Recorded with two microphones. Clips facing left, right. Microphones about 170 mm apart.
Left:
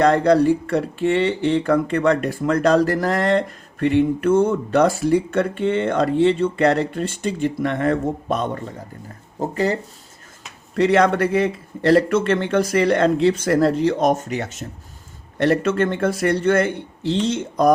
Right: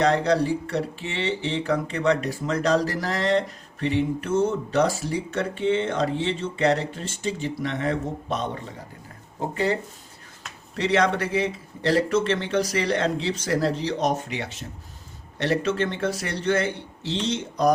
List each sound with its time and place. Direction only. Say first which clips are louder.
0.0 s speech: left 6 dB; 55° left (ahead or behind)
10.8 s speech: left 6 dB; 50° left (ahead or behind)